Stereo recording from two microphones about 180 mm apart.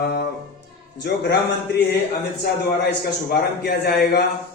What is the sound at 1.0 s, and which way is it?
Speech, 65° left (ahead or behind).